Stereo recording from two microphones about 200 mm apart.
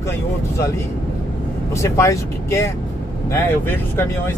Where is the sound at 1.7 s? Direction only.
15° left (ahead or behind).